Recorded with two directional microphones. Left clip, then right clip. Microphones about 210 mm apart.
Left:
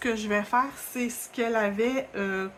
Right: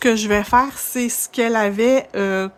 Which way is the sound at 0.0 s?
50° right (ahead or behind).